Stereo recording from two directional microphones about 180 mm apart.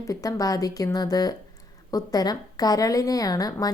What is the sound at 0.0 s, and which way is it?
Speech, 20° left (ahead or behind).